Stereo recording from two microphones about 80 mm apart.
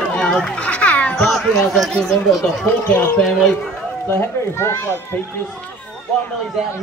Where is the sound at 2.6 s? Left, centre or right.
Left.